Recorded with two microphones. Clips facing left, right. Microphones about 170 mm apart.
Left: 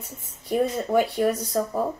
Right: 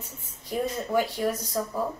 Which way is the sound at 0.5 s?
60° left (ahead or behind).